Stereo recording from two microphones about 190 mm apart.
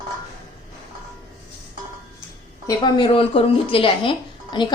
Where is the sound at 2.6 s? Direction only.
25° left (ahead or behind).